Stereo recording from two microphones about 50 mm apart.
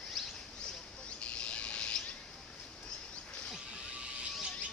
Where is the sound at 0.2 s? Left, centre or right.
Centre.